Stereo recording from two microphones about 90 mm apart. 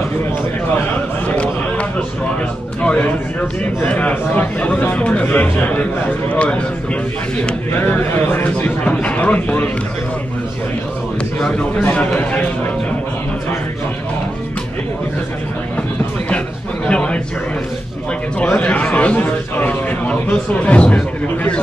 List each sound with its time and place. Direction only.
1.3 s a sound: 15° left (ahead or behind)
2.8 s a man's voice: 15° left (ahead or behind)
7.7 s a man's voice: 25° left (ahead or behind)
11.4 s a man's voice: 15° left (ahead or behind)
16.8 s a sound: 10° left (ahead or behind)
18.4 s a man's voice: 10° left (ahead or behind)